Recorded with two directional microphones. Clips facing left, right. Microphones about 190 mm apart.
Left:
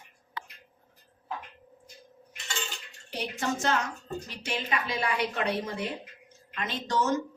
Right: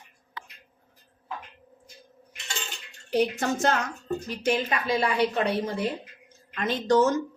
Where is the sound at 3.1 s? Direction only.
45° right (ahead or behind).